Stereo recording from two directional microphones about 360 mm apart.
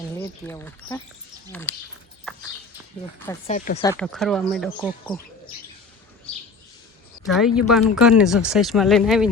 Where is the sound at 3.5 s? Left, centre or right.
Centre.